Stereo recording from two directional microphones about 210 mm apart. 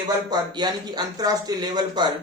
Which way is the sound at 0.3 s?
20° right (ahead or behind).